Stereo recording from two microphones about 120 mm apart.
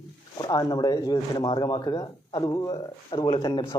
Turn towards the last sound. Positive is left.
turn(degrees=30)  # may be behind; listen again after turning